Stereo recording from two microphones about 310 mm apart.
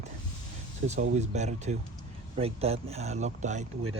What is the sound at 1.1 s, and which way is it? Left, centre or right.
Speech, right.